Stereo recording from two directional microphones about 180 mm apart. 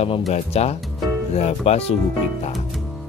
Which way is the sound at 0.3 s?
35° left (ahead or behind).